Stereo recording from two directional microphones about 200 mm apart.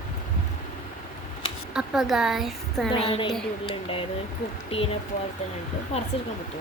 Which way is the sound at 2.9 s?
25° left (ahead or behind).